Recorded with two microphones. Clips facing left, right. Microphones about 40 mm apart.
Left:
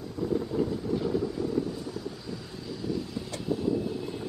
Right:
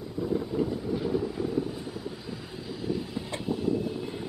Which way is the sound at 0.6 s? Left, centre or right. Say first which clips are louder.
Even; centre.